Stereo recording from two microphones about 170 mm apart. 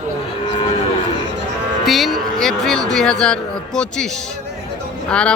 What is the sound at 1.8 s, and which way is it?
Speech, centre (ahead or behind).